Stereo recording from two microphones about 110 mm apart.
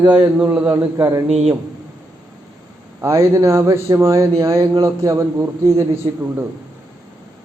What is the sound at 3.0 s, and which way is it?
A man's voice, 25° right (ahead or behind).